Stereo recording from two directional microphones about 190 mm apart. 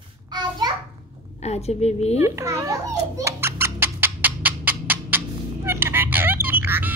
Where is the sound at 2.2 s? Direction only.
15° right (ahead or behind).